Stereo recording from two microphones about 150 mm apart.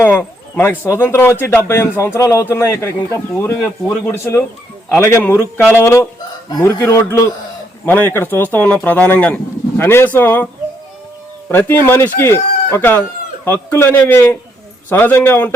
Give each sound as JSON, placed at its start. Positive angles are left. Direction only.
{"t": 0.0, "sound": "a man's voice", "side_deg": 15}
{"t": 11.9, "sound": "a man's voice", "side_deg": 15}